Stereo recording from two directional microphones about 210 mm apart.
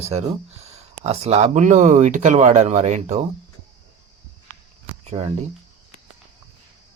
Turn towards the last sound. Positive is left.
turn(degrees=-30)  # may be behind; listen again after turning